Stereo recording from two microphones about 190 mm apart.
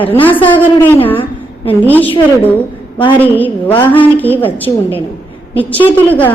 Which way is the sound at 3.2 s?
10° left (ahead or behind).